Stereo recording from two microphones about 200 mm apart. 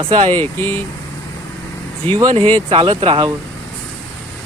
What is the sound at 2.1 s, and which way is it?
Speech, 25° right (ahead or behind).